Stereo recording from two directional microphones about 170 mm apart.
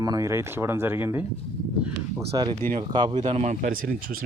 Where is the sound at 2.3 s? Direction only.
25° right (ahead or behind).